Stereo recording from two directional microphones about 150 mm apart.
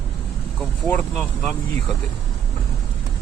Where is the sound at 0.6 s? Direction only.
10° left (ahead or behind).